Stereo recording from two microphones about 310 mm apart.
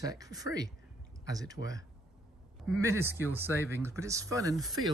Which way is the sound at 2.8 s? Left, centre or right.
Centre.